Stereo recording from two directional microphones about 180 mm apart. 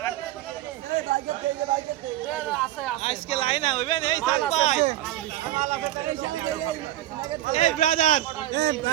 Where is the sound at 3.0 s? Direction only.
35° left (ahead or behind).